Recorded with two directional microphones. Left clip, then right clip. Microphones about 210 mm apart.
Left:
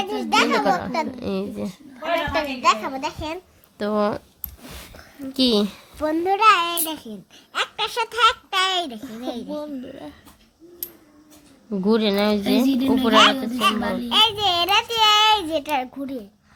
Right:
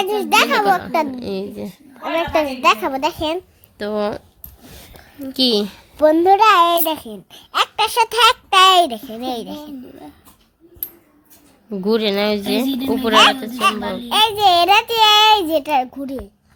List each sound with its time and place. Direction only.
0.0 s a child's voice: 45° right (ahead or behind)
1.2 s a child's voice: 5° left (ahead or behind)
2.3 s a child's voice: 45° right (ahead or behind)
3.8 s speech: centre (ahead or behind)
5.3 s speech: centre (ahead or behind)
6.0 s a child's voice: 35° right (ahead or behind)
11.7 s speech: centre (ahead or behind)
14.1 s a child's voice: 40° right (ahead or behind)